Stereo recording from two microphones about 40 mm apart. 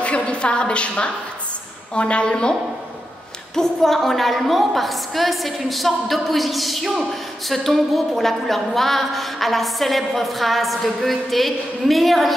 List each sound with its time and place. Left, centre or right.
0.2 s a woman's voice: left
3.5 s a woman's voice: centre